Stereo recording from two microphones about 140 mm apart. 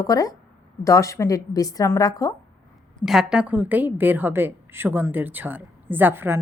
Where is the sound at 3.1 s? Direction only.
5° right (ahead or behind).